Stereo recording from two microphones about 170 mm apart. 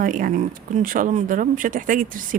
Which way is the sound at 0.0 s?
55° right (ahead or behind).